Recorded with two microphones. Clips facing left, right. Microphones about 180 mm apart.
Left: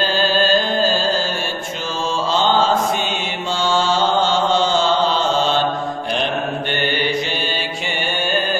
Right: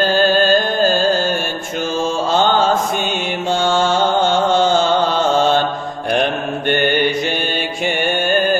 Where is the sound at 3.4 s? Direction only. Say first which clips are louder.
Right 3 dB; 50° right (ahead or behind).